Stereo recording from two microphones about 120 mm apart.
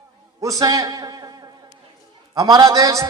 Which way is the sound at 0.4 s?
30° right (ahead or behind).